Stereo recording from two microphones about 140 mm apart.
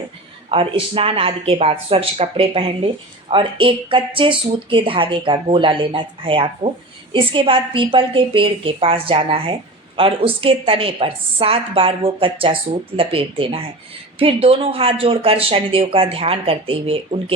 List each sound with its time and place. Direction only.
0.5 s speech: 40° right (ahead or behind)